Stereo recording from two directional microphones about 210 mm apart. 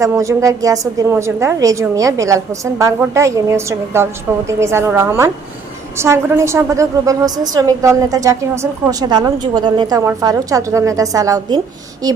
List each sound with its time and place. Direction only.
0.0 s a woman's voice: 15° right (ahead or behind)